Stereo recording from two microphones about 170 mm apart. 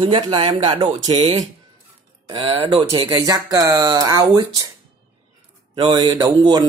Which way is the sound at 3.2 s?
20° right (ahead or behind).